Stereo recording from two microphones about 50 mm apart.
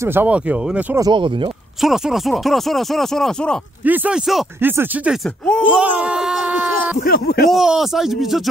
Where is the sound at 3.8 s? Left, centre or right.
Right.